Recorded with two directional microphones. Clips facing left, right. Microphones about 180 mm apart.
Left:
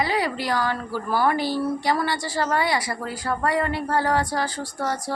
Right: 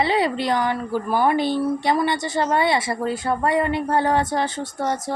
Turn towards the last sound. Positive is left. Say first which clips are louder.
# right 3 dB
turn(degrees=-20)  # may be behind; listen again after turning